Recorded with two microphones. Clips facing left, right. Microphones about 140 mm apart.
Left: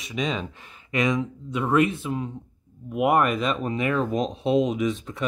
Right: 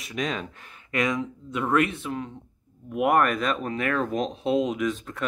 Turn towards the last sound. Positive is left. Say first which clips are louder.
# left 2 dB
turn(degrees=5)  # may be behind; listen again after turning